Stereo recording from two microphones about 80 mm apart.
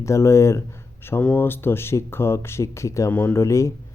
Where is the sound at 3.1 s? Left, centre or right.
Left.